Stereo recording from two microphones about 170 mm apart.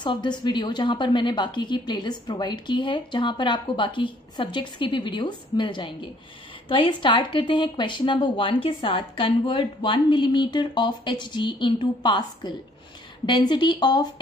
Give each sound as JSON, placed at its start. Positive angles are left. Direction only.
{"t": 0.0, "sound": "a woman's voice", "side_deg": 25}